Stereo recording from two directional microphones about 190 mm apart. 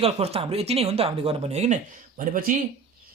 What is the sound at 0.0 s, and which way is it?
Speech, 30° right (ahead or behind).